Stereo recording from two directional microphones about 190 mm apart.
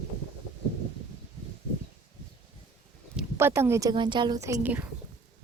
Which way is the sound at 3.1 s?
10° right (ahead or behind).